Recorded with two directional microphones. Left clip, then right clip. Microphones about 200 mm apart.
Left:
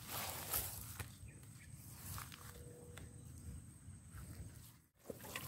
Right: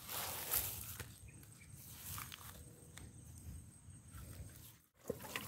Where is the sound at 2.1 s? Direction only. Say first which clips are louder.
Right 2 dB; 30° right (ahead or behind).